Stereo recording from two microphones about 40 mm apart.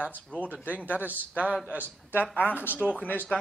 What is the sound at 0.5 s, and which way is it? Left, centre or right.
Speech, right.